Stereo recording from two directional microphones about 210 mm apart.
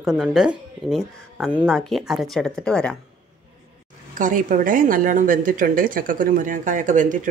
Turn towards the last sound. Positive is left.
turn(degrees=-35)  # may be behind; listen again after turning